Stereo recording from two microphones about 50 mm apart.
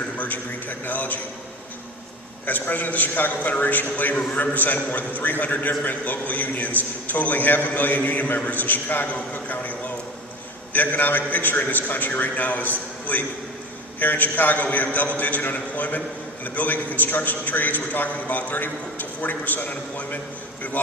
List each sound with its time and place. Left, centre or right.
0.9 s a man's voice: left
2.5 s a man's voice: left